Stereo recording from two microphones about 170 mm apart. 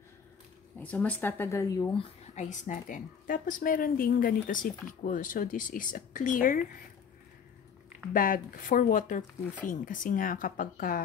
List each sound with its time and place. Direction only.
0.7 s speech: 10° left (ahead or behind)
2.3 s a woman's voice: 50° left (ahead or behind)
8.1 s a woman's voice: 55° left (ahead or behind)